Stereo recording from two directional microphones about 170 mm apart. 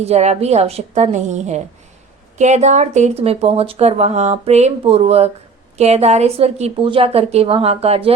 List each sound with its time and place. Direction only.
0.0 s speech: 40° right (ahead or behind)